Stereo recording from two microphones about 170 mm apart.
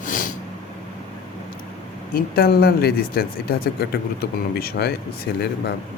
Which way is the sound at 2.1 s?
60° left (ahead or behind).